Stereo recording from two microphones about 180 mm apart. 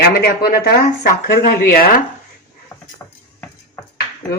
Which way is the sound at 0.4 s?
55° left (ahead or behind).